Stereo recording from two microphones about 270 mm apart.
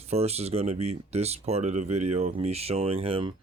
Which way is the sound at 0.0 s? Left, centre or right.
Right.